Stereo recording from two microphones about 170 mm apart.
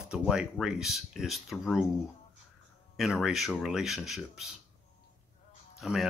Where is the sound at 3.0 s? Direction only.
Centre (ahead or behind).